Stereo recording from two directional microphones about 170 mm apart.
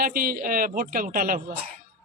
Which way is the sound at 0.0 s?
60° right (ahead or behind).